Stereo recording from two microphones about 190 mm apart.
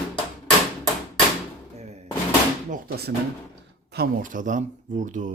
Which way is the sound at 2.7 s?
55° right (ahead or behind).